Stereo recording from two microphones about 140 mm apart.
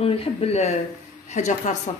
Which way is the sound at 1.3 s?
60° left (ahead or behind).